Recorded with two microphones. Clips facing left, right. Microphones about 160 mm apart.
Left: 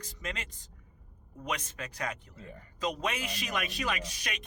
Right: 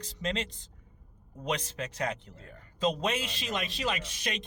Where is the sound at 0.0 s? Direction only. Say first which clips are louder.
Right 7 dB; 30° right (ahead or behind).